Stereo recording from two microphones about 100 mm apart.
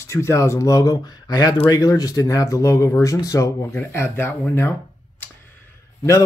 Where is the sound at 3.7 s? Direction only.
25° left (ahead or behind).